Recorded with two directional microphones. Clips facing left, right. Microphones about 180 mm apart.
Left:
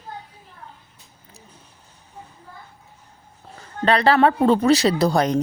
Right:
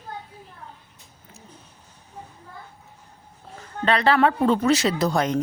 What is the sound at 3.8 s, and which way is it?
Speech, 35° left (ahead or behind).